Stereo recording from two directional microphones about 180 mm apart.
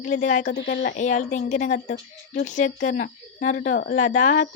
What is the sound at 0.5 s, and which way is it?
Speech, 75° left (ahead or behind).